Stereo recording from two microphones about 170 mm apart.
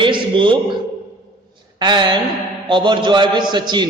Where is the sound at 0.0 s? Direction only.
30° right (ahead or behind).